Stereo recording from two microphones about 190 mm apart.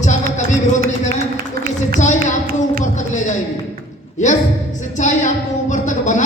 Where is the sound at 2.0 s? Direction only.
40° left (ahead or behind).